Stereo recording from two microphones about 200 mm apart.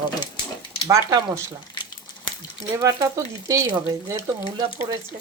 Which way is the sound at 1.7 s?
25° left (ahead or behind).